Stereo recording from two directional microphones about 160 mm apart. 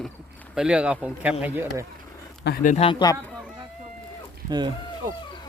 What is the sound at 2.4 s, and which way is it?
Speech, 90° left.